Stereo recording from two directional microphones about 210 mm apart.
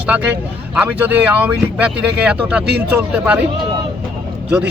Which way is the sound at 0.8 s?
10° right (ahead or behind).